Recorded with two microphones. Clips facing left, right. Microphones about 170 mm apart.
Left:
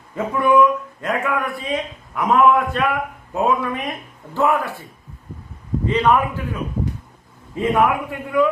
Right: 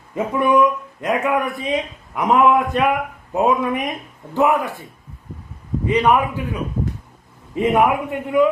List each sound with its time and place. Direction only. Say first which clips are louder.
0.1 s a man's voice: even; 20° right (ahead or behind)
5.8 s a man's voice: right 1 dB; 15° right (ahead or behind)